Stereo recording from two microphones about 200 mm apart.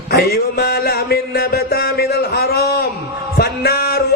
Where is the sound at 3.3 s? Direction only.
50° left (ahead or behind).